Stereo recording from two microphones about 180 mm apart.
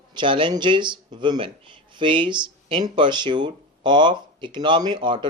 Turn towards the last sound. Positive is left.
turn(degrees=-25)  # may be behind; listen again after turning